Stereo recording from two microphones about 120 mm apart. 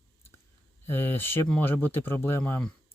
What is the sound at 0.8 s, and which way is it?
Speech, 20° left (ahead or behind).